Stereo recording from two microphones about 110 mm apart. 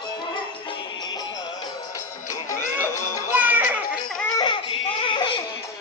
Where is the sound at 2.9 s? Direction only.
30° left (ahead or behind).